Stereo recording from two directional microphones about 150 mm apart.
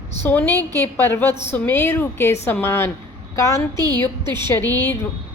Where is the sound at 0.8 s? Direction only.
15° left (ahead or behind).